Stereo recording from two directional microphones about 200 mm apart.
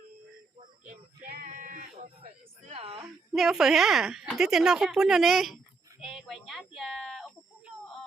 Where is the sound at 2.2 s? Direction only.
30° right (ahead or behind).